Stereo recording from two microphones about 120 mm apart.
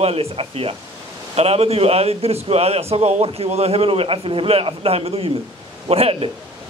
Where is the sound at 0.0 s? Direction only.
55° right (ahead or behind).